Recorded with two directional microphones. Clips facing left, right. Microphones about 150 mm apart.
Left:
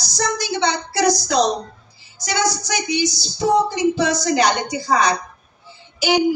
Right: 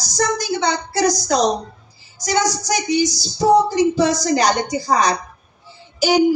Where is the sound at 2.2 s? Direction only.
45° right (ahead or behind).